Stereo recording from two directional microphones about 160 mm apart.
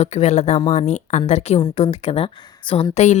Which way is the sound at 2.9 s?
45° left (ahead or behind).